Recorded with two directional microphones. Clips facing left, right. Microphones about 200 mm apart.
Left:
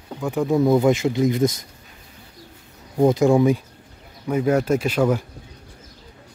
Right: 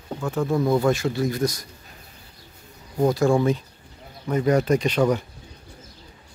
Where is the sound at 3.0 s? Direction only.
20° left (ahead or behind).